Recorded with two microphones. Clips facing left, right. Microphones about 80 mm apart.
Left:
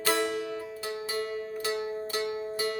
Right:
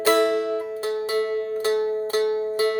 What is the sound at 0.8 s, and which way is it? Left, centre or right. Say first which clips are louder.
Music: right 9 dB; right.